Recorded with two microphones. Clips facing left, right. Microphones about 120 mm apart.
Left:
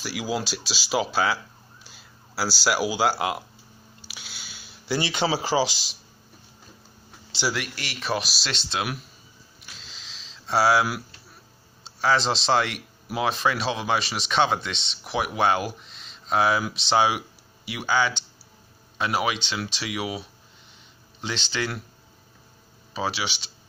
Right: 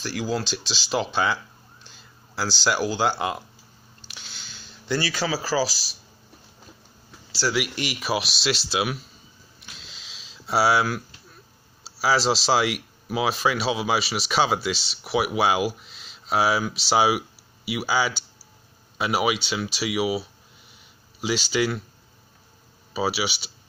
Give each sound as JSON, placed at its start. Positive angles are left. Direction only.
{"t": 0.0, "sound": "speech", "side_deg": 10}
{"t": 4.0, "sound": "a sound", "side_deg": 5}
{"t": 5.0, "sound": "speech", "side_deg": 25}
{"t": 7.7, "sound": "speech", "side_deg": -15}
{"t": 9.6, "sound": "a sound", "side_deg": 0}
{"t": 11.8, "sound": "speech", "side_deg": -5}
{"t": 22.9, "sound": "speech", "side_deg": -5}